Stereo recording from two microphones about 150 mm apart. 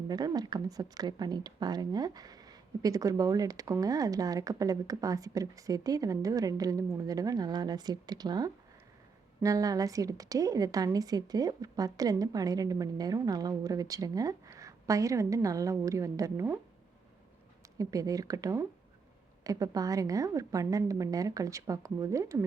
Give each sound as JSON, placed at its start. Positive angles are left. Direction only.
{"t": 0.1, "sound": "a woman's voice", "side_deg": -25}
{"t": 17.7, "sound": "a woman's voice", "side_deg": -25}